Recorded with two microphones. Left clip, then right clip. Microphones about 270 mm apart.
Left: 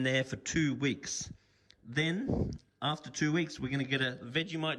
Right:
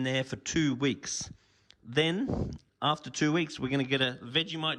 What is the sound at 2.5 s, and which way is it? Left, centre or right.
A man's voice, centre.